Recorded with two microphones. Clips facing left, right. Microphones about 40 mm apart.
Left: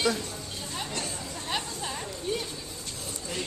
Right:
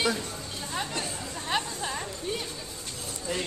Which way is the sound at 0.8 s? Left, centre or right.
Centre.